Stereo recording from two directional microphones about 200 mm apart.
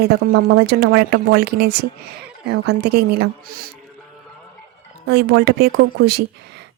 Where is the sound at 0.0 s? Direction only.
55° right (ahead or behind).